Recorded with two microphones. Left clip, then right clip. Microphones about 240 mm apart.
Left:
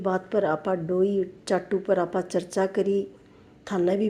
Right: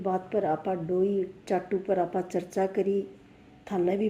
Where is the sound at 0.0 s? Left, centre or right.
Left.